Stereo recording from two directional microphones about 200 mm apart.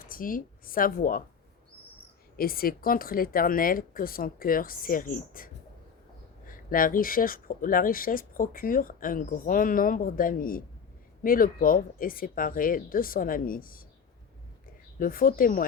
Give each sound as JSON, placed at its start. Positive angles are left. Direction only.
{"t": 0.0, "sound": "speech", "side_deg": 45}
{"t": 2.3, "sound": "speech", "side_deg": 50}
{"t": 14.9, "sound": "speech", "side_deg": 45}